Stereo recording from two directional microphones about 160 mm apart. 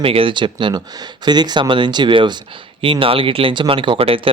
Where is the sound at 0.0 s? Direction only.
35° right (ahead or behind).